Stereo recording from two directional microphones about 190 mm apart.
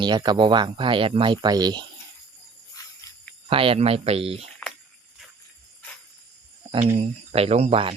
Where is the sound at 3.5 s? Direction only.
30° right (ahead or behind).